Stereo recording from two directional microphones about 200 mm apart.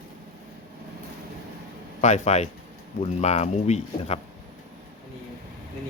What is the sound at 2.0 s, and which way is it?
Speech, 35° left (ahead or behind).